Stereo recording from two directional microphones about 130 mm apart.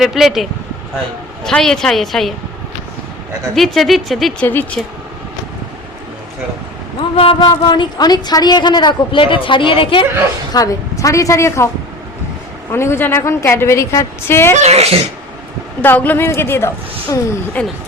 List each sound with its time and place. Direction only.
0.0 s speech: centre (ahead or behind)
1.5 s speech: 5° left (ahead or behind)
3.5 s speech: centre (ahead or behind)
4.4 s speech: 15° left (ahead or behind)
7.2 s speech: 45° left (ahead or behind)
7.4 s a woman's voice: 35° left (ahead or behind)
10.5 s a woman's voice: 25° left (ahead or behind)
12.7 s a woman's voice: 20° left (ahead or behind)
14.5 s speech: 55° right (ahead or behind)
15.8 s a woman's voice: 15° left (ahead or behind)
17.6 s speech: 10° left (ahead or behind)